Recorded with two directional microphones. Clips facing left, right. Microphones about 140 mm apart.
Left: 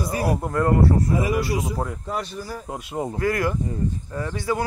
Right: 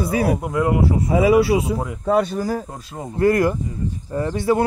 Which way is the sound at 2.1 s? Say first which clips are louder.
Right 11 dB; 55° right (ahead or behind).